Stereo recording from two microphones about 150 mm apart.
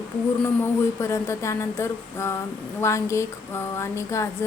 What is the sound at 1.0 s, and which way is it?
A woman's voice, 20° left (ahead or behind).